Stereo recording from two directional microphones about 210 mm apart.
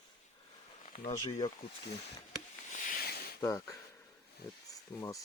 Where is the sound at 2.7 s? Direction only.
40° left (ahead or behind).